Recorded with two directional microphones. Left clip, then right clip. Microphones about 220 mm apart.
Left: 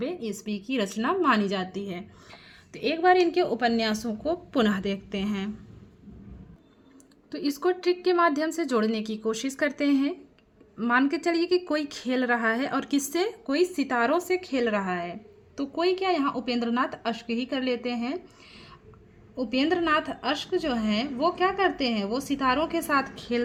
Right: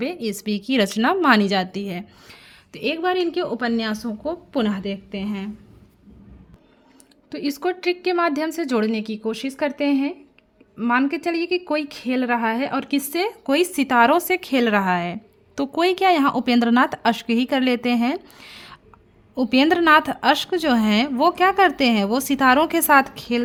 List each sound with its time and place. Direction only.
0.0 s a woman's voice: 45° right (ahead or behind); by 5.5 s 10° right (ahead or behind)
7.3 s a woman's voice: 25° right (ahead or behind)